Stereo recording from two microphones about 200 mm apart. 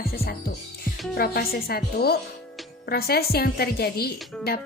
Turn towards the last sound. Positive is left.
turn(degrees=50)  # may be behind; listen again after turning